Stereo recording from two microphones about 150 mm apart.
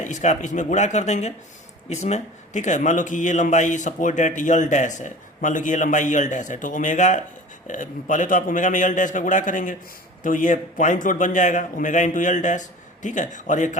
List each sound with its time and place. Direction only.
0.0 s a man's voice: 55° left (ahead or behind)